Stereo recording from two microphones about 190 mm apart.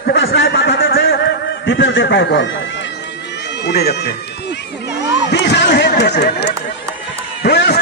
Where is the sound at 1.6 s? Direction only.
70° left (ahead or behind).